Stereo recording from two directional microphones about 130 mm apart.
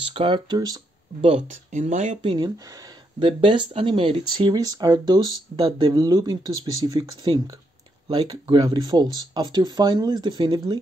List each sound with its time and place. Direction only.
0.0 s speech: 45° right (ahead or behind)
1.5 s speech: 70° right (ahead or behind)
2.2 s speech: 35° right (ahead or behind)
4.6 s speech: 30° right (ahead or behind)